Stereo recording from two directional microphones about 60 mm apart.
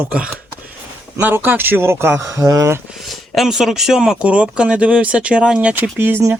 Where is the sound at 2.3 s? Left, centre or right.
Right.